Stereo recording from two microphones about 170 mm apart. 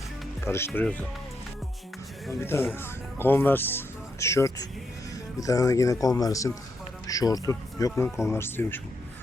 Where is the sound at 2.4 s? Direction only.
15° left (ahead or behind).